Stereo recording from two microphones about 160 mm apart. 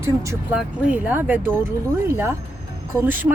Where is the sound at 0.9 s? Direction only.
10° right (ahead or behind).